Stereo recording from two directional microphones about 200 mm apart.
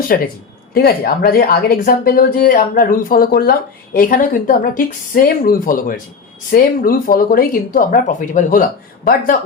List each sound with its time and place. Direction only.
0.1 s speech: 45° left (ahead or behind)